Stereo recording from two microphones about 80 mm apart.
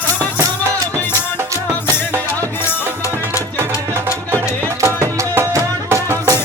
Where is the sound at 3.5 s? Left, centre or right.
Right.